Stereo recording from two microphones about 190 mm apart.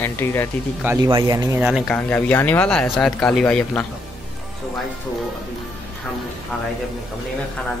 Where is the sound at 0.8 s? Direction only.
20° right (ahead or behind).